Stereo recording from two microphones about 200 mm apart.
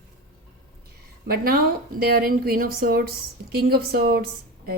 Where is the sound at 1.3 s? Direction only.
50° right (ahead or behind).